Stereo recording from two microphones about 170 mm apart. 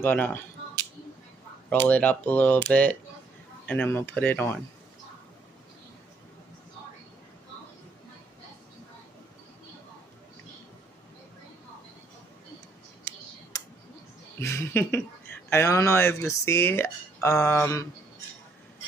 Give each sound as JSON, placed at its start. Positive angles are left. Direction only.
{"t": 0.0, "sound": "speech", "side_deg": 10}
{"t": 1.7, "sound": "speech", "side_deg": 10}
{"t": 3.6, "sound": "speech", "side_deg": 10}
{"t": 13.1, "sound": "clicking", "side_deg": 15}
{"t": 14.4, "sound": "speech", "side_deg": 15}